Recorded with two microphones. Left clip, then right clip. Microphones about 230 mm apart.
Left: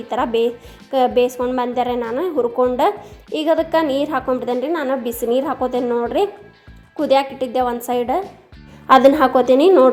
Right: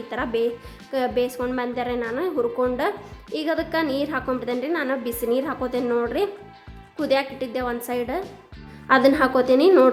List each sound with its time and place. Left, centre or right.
0.1 s a woman's voice: centre